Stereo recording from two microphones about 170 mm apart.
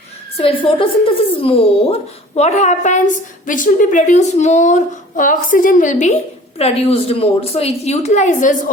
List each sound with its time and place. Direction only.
0.3 s speech: 30° left (ahead or behind); by 6.1 s 45° left (ahead or behind)
6.6 s speech: 35° left (ahead or behind)